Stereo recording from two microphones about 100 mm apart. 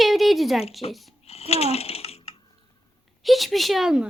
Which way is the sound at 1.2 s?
90° left.